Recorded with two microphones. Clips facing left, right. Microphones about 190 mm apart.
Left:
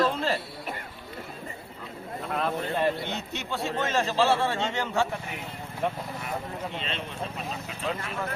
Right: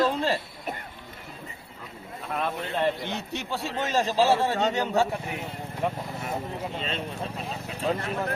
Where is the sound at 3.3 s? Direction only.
35° right (ahead or behind).